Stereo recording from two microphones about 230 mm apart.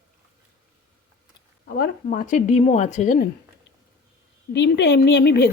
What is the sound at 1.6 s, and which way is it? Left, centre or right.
Speech, left.